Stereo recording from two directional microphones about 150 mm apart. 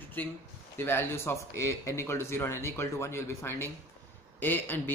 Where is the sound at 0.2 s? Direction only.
10° left (ahead or behind).